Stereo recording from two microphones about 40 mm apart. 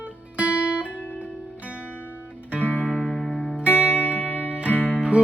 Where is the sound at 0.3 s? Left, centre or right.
Right.